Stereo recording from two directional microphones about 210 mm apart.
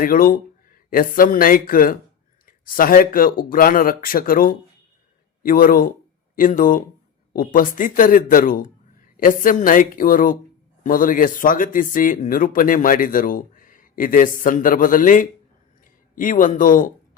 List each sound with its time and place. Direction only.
0.0 s a man's voice: 40° left (ahead or behind)